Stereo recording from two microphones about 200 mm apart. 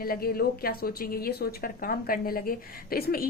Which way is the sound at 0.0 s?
50° left (ahead or behind).